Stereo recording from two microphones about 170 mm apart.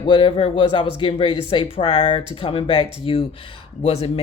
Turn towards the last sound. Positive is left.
turn(degrees=40)  # may be behind; listen again after turning